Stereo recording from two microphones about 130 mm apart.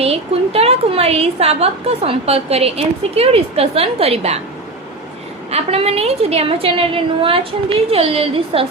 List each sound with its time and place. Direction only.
0.0 s a woman's voice: 50° right (ahead or behind)
5.5 s a woman's voice: 50° right (ahead or behind)